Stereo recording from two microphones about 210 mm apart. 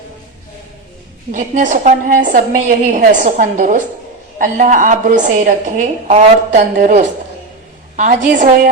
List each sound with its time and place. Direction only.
1.3 s a woman's voice: 40° right (ahead or behind)